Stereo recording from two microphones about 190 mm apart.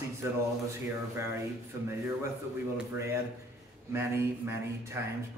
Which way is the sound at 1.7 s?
15° right (ahead or behind).